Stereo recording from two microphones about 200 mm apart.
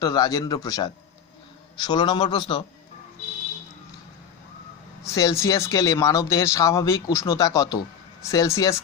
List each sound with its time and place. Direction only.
0.0 s a man's voice: 20° left (ahead or behind)
5.0 s speech: 15° left (ahead or behind)